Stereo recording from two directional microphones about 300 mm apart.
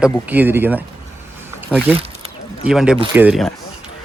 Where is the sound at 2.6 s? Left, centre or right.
Centre.